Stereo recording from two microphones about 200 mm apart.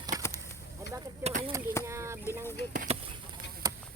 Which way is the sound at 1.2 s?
30° right (ahead or behind).